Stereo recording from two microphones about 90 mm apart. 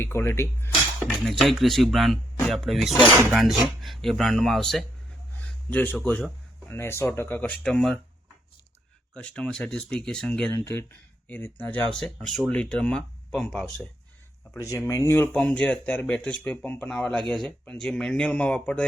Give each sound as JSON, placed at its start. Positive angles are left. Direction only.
{"t": 0.0, "sound": "speech", "side_deg": 30}
{"t": 1.2, "sound": "speech", "side_deg": 0}
{"t": 5.7, "sound": "speech", "side_deg": 20}
{"t": 7.6, "sound": "speech", "side_deg": 5}
{"t": 9.1, "sound": "speech", "side_deg": 10}
{"t": 10.5, "sound": "speech", "side_deg": 25}
{"t": 11.9, "sound": "speech", "side_deg": 5}
{"t": 12.5, "sound": "speech", "side_deg": 15}
{"t": 14.5, "sound": "speech", "side_deg": 35}
{"t": 15.1, "sound": "speech", "side_deg": 20}
{"t": 16.9, "sound": "speech", "side_deg": 10}